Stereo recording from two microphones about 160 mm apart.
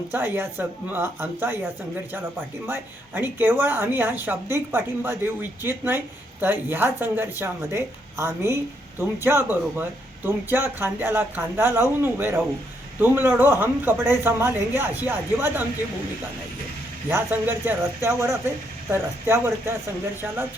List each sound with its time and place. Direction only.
0.1 s speech: 10° right (ahead or behind)
17.1 s speech: 15° right (ahead or behind)